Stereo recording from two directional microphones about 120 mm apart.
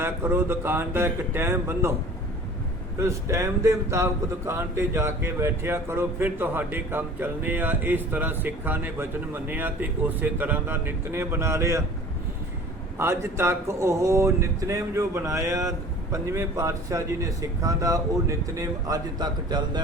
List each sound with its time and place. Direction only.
0.0 s speech: 20° right (ahead or behind)
3.0 s speech: 25° right (ahead or behind)
13.0 s speech: 20° right (ahead or behind)